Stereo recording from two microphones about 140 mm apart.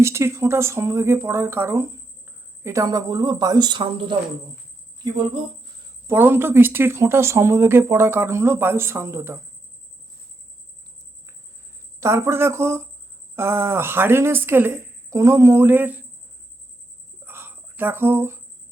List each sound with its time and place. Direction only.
0.0 s speech: 20° right (ahead or behind); by 5.5 s 35° right (ahead or behind)
6.1 s speech: 15° right (ahead or behind)
11.9 s speech: 20° right (ahead or behind)
17.2 s a sound: 15° right (ahead or behind)